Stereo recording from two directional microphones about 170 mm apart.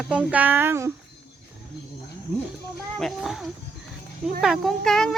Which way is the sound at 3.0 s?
Centre (ahead or behind).